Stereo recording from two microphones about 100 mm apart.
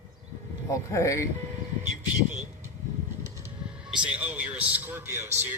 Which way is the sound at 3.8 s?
10° right (ahead or behind).